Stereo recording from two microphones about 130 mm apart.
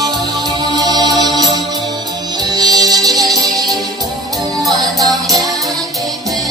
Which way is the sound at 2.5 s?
30° right (ahead or behind).